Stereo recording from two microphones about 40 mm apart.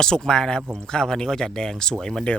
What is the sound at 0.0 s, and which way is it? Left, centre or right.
Speech, centre.